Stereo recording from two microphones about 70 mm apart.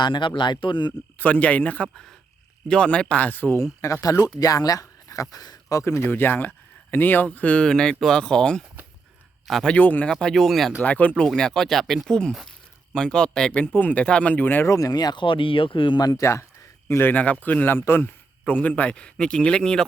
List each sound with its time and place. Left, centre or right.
0.0 s speech: left
1.2 s a man's voice: left
3.6 s speech: left
4.4 s speech: left
6.1 s a man's voice: left; by 8.6 s centre
9.6 s a man's voice: left
10.1 s speech: centre
10.8 s a man's voice: left
11.2 s speech: centre
13.6 s a man's voice: left
14.7 s speech: left
16.2 s speech: left
16.9 s a man's voice: left; by 19.9 s centre